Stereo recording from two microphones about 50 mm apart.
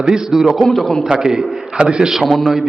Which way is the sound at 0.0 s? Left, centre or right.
Centre.